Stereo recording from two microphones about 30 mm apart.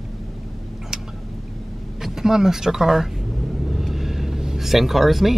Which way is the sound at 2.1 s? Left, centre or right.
Centre.